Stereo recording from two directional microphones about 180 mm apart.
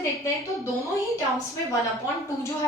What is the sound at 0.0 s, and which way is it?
A woman's voice, 15° left (ahead or behind).